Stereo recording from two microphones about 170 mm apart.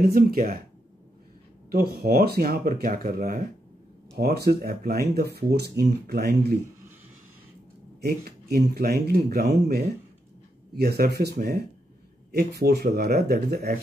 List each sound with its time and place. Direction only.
0.0 s speech: 60° right (ahead or behind)
1.7 s speech: 65° right (ahead or behind)
4.5 s speech: 60° right (ahead or behind)
8.0 s speech: 70° right (ahead or behind)